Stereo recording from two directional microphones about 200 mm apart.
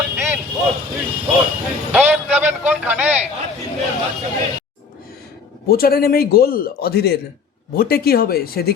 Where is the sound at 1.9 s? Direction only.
10° right (ahead or behind).